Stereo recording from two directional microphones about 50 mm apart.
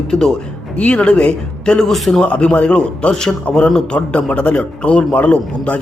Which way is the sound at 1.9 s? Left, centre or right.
Centre.